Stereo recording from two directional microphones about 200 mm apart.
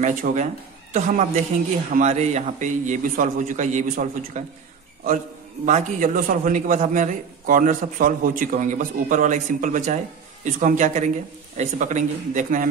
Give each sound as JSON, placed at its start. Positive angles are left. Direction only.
{"t": 0.0, "sound": "a man's voice", "side_deg": -40}
{"t": 5.7, "sound": "a man's voice", "side_deg": -40}